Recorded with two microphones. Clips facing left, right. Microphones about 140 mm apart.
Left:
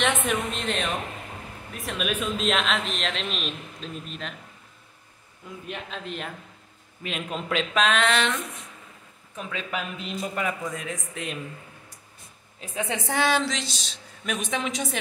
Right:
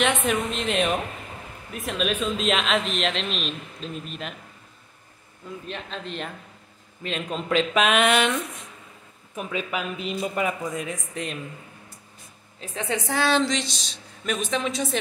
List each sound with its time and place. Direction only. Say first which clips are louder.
0.0 s a man's voice: right 2 dB; centre (ahead or behind)
5.7 s a man's voice: even; 5° left (ahead or behind)
12.8 s a woman's voice: right 1 dB; 20° left (ahead or behind)
13.4 s a woman's voice: right 4 dB; centre (ahead or behind)